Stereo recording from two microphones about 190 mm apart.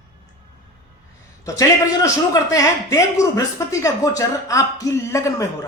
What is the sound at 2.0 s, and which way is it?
Speech, 15° left (ahead or behind).